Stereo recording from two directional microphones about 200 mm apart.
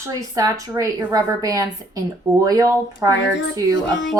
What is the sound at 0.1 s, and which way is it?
A woman's voice, 15° right (ahead or behind).